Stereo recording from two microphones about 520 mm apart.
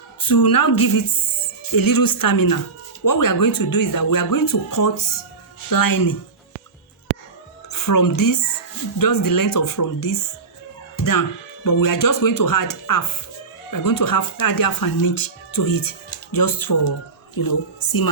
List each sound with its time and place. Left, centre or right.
0.2 s speech: left
7.7 s a woman's voice: left